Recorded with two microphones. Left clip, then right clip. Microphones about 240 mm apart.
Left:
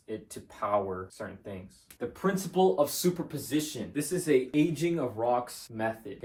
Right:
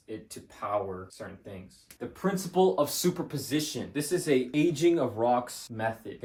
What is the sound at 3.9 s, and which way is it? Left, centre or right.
Speech, right.